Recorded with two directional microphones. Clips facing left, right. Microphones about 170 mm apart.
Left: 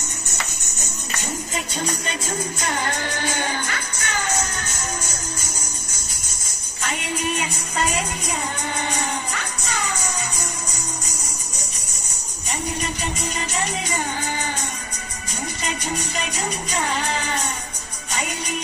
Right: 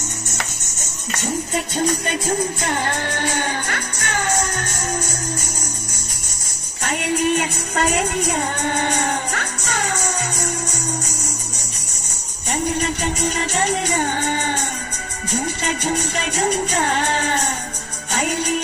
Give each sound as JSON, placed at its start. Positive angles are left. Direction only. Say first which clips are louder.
{"t": 2.7, "sound": "music", "louder": "right 3 dB", "side_deg": -55}
{"t": 6.9, "sound": "music", "louder": "right 7 dB", "side_deg": -60}
{"t": 12.4, "sound": "music", "louder": "right 6 dB", "side_deg": -60}
{"t": 15.6, "sound": "music", "louder": "right 5 dB", "side_deg": -65}